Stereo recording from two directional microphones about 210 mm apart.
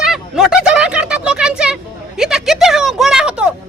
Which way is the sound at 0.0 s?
Centre (ahead or behind).